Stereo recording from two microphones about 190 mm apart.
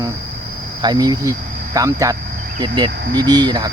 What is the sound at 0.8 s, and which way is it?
Speech, 20° right (ahead or behind).